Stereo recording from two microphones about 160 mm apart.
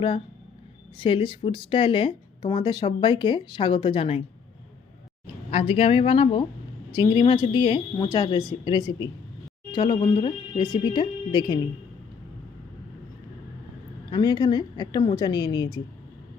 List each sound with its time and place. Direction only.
0.9 s speech: 30° left (ahead or behind)
5.5 s speech: 35° left (ahead or behind)
14.1 s speech: 25° left (ahead or behind)